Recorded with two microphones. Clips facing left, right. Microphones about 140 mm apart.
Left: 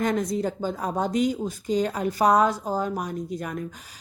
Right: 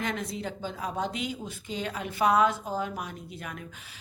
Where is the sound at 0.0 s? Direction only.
40° left (ahead or behind).